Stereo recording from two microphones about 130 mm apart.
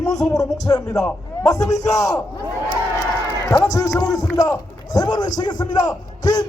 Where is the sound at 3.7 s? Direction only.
25° left (ahead or behind).